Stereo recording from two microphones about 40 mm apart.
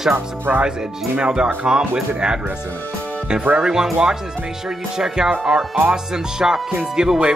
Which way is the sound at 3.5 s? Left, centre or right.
Centre.